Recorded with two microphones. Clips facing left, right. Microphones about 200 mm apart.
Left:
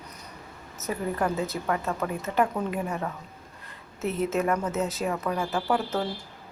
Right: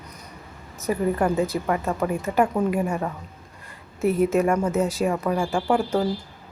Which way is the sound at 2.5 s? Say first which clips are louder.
Right 7 dB; 25° right (ahead or behind).